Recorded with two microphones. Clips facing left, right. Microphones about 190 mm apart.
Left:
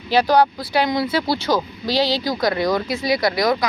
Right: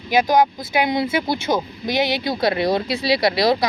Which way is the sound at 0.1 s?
20° right (ahead or behind).